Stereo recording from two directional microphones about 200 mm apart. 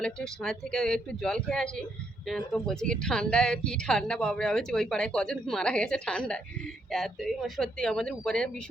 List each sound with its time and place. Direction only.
0.0 s speech: 5° left (ahead or behind)